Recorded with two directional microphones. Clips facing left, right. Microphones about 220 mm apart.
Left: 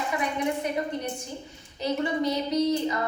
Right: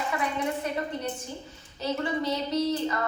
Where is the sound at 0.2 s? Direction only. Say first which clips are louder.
Left 2 dB; 15° left (ahead or behind).